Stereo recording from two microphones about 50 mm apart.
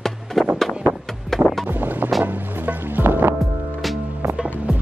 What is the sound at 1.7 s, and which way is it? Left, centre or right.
Music, right.